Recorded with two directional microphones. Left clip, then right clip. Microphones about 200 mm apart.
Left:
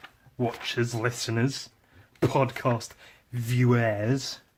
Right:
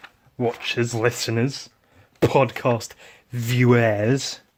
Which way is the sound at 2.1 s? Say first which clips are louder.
Right 7 dB; 35° right (ahead or behind).